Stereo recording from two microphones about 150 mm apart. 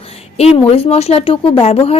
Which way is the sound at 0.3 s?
45° left (ahead or behind).